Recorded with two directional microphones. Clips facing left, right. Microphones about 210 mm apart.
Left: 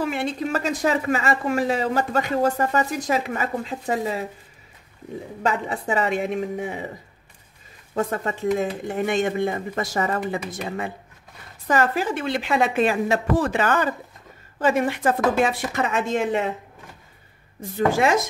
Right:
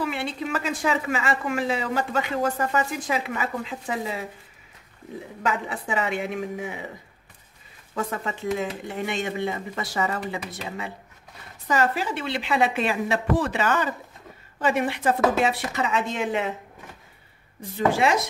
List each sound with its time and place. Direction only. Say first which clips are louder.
0.0 s a woman's voice: left 3 dB; 45° left (ahead or behind)
5.4 s a woman's voice: left 3 dB; 40° left (ahead or behind)
7.9 s speech: left 4 dB; 40° left (ahead or behind)
17.9 s speech: left 3 dB; 45° left (ahead or behind)